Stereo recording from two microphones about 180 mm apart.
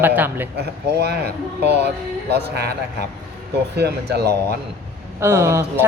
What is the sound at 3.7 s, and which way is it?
Speech, 65° right (ahead or behind).